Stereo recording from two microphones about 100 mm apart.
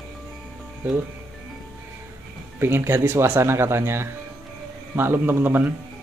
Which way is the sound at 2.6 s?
25° right (ahead or behind).